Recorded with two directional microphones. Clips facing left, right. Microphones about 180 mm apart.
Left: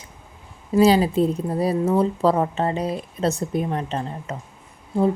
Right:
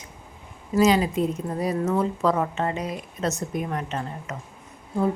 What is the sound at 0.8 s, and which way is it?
A woman's voice, 30° left (ahead or behind).